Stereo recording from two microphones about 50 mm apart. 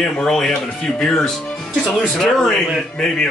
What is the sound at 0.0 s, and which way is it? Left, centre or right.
Speech, centre.